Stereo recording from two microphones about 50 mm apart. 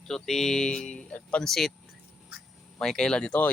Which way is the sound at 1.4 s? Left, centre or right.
Centre.